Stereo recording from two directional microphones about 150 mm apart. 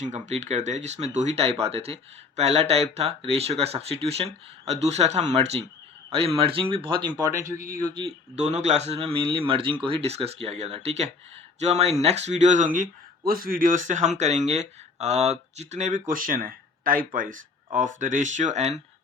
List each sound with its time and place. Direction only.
0.0 s speech: 50° right (ahead or behind); by 8.0 s 25° right (ahead or behind)
8.4 s speech: 50° right (ahead or behind)